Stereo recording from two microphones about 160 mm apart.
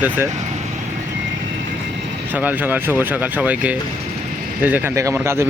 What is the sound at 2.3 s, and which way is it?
Speech, 10° right (ahead or behind).